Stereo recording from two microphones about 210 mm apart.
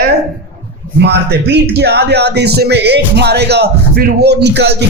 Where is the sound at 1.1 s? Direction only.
55° right (ahead or behind).